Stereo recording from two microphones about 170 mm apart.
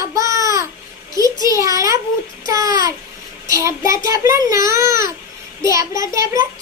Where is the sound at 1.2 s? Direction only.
20° right (ahead or behind).